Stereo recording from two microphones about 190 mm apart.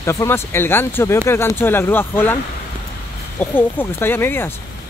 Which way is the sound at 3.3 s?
10° left (ahead or behind).